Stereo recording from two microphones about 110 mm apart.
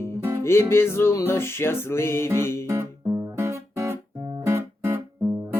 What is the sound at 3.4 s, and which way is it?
Guitar, 20° right (ahead or behind).